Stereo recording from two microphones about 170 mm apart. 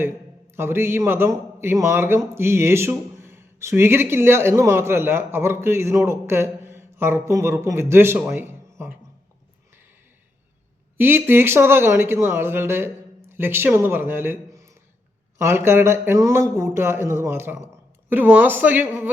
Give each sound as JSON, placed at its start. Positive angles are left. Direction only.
{"t": 0.5, "sound": "a man's voice", "side_deg": -15}
{"t": 8.3, "sound": "a sound", "side_deg": -10}
{"t": 10.9, "sound": "a man's voice", "side_deg": -15}